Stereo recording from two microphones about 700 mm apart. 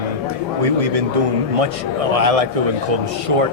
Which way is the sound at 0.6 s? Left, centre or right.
Right.